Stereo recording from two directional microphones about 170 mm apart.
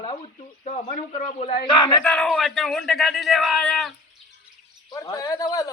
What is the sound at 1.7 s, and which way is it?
Speech, 25° left (ahead or behind).